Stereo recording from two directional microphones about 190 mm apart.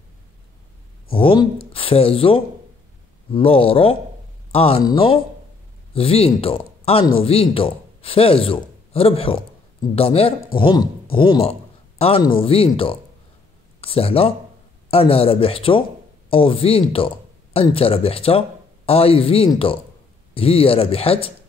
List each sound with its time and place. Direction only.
1.1 s speech: 25° left (ahead or behind)